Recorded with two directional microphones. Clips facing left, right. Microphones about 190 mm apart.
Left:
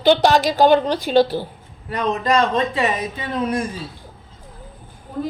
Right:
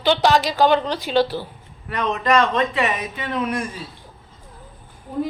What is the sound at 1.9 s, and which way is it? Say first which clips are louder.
A man's voice: left 1 dB; 35° left (ahead or behind).